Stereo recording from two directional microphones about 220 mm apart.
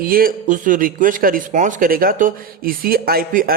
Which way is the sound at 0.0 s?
40° right (ahead or behind).